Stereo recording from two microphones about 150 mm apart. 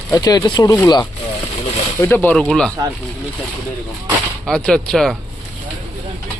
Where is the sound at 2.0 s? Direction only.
10° left (ahead or behind).